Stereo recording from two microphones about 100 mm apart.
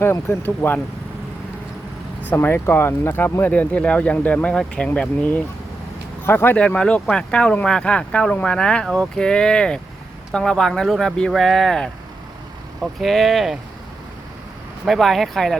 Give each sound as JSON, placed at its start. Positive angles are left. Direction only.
{"t": 0.0, "sound": "speech", "side_deg": 25}
{"t": 2.2, "sound": "speech", "side_deg": 20}
{"t": 14.8, "sound": "speech", "side_deg": 0}